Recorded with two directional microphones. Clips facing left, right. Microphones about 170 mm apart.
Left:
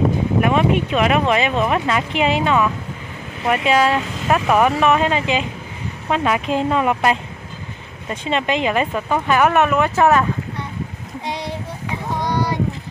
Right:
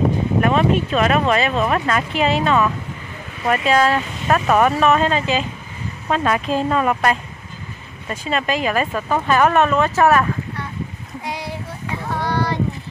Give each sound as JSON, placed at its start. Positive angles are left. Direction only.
{"t": 0.4, "sound": "speech", "side_deg": 10}
{"t": 11.2, "sound": "child singing", "side_deg": 20}